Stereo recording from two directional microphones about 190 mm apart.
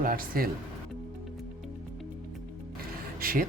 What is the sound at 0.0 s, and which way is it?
Speech, 50° right (ahead or behind).